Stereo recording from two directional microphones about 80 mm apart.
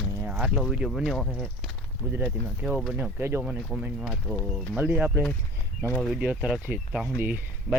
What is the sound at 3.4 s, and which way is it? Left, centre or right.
Speech, centre.